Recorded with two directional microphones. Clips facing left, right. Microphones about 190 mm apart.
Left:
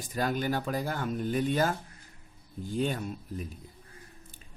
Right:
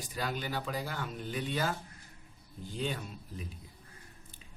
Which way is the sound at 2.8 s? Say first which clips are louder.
Left 6 dB; 50° left (ahead or behind).